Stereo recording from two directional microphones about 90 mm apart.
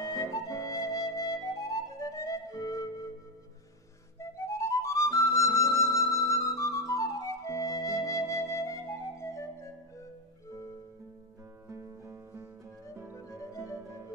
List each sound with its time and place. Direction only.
0.5 s flute: 40° left (ahead or behind)
4.2 s music: 35° left (ahead or behind)
6.1 s flute: 35° left (ahead or behind)
11.7 s music: 35° right (ahead or behind)
13.4 s music: 35° left (ahead or behind)